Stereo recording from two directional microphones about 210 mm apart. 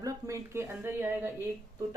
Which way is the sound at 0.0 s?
15° right (ahead or behind).